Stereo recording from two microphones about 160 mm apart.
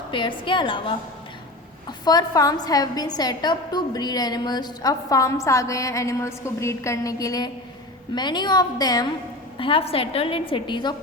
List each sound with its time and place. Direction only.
0.1 s a woman's voice: 30° left (ahead or behind)
2.0 s a woman's voice: 25° left (ahead or behind)
9.6 s a woman's voice: 35° left (ahead or behind)